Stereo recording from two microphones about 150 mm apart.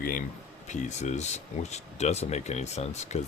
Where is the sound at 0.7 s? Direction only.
50° left (ahead or behind).